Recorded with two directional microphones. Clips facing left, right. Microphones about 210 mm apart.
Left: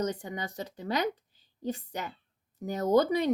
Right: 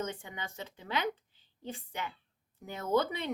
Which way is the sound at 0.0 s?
40° left (ahead or behind).